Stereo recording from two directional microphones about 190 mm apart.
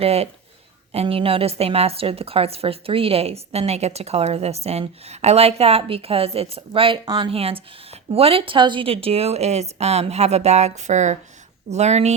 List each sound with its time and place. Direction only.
0.0 s a woman's voice: 35° right (ahead or behind)